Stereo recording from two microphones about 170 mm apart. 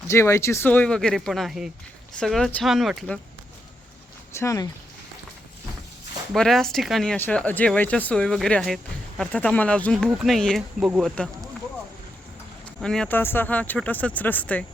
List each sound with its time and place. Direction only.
0.1 s speech: 15° left (ahead or behind); by 3.2 s centre (ahead or behind)
4.4 s speech: 20° left (ahead or behind)
6.3 s speech: 5° left (ahead or behind)
11.1 s speech: 5° left (ahead or behind)
12.8 s speech: 5° left (ahead or behind)